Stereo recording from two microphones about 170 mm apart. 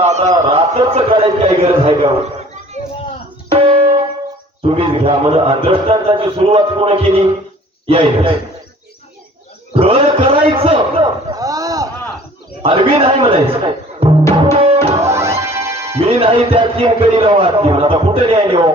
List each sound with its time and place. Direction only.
0.0 s speech: 40° right (ahead or behind)
3.5 s music: 35° right (ahead or behind)
4.6 s speech: 35° right (ahead or behind)
9.7 s speech: 35° right (ahead or behind)
11.3 s a sound: 20° right (ahead or behind)
12.6 s speech: 35° right (ahead or behind)
14.4 s tabla: 35° right (ahead or behind)
14.9 s music: 15° right (ahead or behind)
16.0 s speech: 35° right (ahead or behind)